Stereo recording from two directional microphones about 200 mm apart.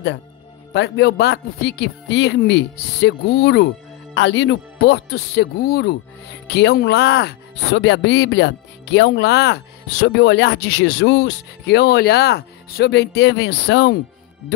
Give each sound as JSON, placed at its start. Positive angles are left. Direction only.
{"t": 0.7, "sound": "speech", "side_deg": 55}